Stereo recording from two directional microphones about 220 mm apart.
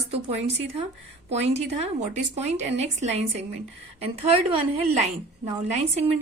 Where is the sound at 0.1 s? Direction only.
30° right (ahead or behind).